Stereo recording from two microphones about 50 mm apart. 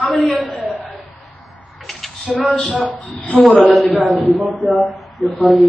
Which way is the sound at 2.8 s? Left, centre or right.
Left.